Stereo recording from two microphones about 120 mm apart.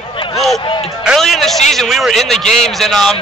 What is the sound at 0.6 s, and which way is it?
Speech, 45° left (ahead or behind).